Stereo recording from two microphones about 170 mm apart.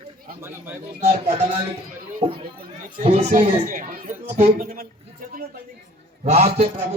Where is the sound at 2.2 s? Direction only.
40° right (ahead or behind).